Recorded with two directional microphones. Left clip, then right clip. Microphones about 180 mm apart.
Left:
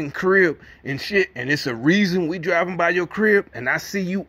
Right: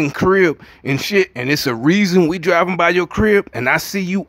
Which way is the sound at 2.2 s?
30° right (ahead or behind).